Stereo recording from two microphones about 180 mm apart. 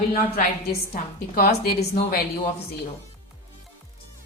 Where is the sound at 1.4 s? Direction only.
60° left (ahead or behind).